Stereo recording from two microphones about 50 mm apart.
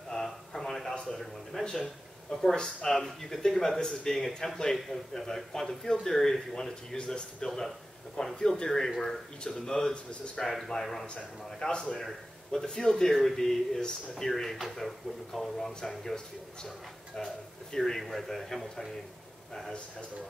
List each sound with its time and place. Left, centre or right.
0.1 s a sound: centre
2.5 s speech: centre
10.4 s a man's voice: centre
11.6 s a man's voice: centre
12.0 s speech: centre
17.7 s a man's voice: centre